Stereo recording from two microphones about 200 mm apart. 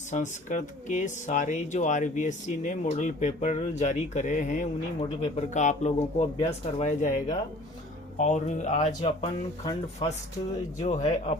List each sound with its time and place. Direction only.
0.1 s speech: 40° left (ahead or behind)
9.0 s speech: 25° left (ahead or behind)